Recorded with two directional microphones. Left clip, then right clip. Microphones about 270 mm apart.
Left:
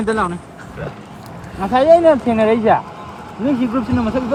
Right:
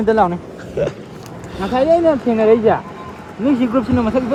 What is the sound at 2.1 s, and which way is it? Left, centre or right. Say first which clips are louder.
Speech: right 2 dB; left.